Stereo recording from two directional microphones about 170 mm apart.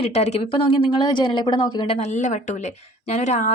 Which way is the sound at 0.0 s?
40° left (ahead or behind).